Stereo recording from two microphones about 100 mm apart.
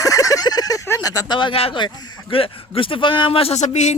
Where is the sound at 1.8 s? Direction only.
45° left (ahead or behind).